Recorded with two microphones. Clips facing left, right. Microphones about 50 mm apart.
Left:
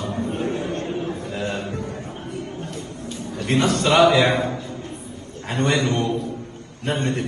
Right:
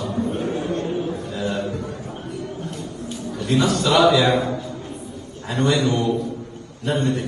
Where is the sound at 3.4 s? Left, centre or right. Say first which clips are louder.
Even; left.